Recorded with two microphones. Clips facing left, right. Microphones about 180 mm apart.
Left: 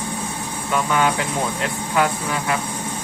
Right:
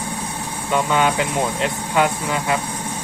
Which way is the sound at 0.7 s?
20° right (ahead or behind).